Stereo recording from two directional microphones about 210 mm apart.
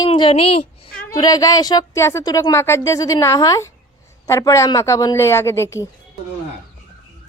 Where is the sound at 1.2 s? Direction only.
15° left (ahead or behind).